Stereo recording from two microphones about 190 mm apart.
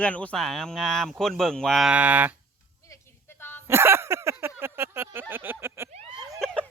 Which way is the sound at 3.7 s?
15° right (ahead or behind).